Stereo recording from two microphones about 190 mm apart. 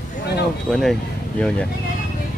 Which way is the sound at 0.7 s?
Centre (ahead or behind).